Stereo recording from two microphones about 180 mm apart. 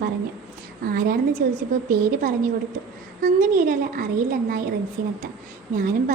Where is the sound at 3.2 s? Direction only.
45° right (ahead or behind).